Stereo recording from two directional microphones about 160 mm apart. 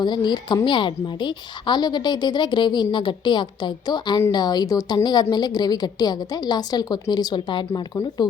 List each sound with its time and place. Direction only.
0.0 s a woman's voice: 30° left (ahead or behind)